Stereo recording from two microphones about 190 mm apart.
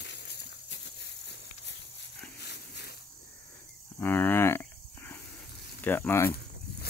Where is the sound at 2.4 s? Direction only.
60° left (ahead or behind).